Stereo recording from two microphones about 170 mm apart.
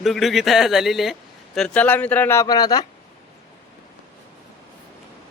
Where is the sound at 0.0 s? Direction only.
Centre (ahead or behind); by 2.8 s 25° left (ahead or behind).